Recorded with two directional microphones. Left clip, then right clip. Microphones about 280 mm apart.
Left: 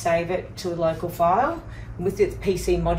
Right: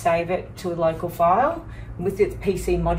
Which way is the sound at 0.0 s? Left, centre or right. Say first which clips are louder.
Right 1 dB; centre.